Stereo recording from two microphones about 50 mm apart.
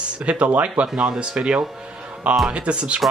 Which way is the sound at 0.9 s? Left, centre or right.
Centre.